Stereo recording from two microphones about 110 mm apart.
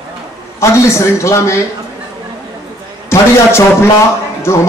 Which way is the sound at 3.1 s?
25° left (ahead or behind).